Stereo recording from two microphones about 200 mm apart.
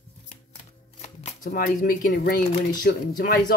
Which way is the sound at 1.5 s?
50° left (ahead or behind).